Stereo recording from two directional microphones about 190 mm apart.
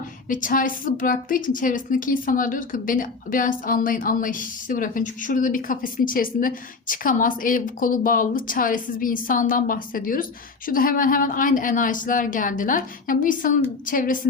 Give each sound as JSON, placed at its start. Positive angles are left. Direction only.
{"t": 0.3, "sound": "a woman's voice", "side_deg": 45}